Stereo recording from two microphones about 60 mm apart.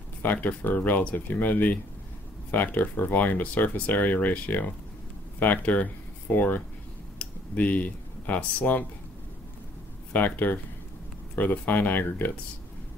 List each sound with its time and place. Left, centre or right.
0.2 s speech: left
10.1 s speech: left